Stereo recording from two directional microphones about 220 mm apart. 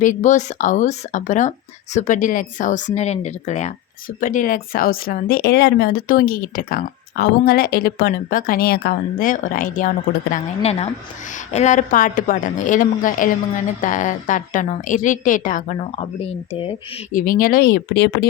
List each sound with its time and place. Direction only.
0.0 s speech: 35° left (ahead or behind)
17.2 s speech: 40° left (ahead or behind)